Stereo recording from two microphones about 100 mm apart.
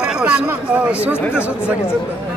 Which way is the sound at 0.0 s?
10° right (ahead or behind).